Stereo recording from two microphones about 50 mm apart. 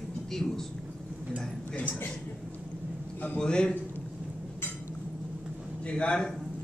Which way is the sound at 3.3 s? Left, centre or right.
Centre.